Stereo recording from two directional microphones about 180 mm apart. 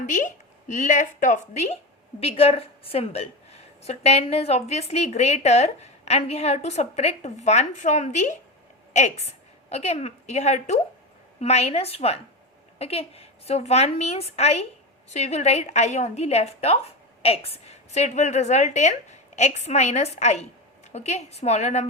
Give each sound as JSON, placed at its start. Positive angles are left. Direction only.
{"t": 0.0, "sound": "a woman's voice", "side_deg": 45}